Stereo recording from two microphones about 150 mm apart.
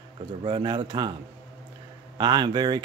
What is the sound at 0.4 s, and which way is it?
Speech, 30° right (ahead or behind).